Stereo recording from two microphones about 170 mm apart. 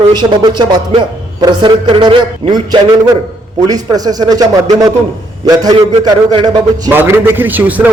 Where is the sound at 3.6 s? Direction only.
20° right (ahead or behind).